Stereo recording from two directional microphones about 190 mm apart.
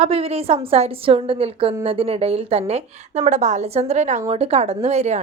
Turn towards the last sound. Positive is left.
turn(degrees=-35)  # may be behind; listen again after turning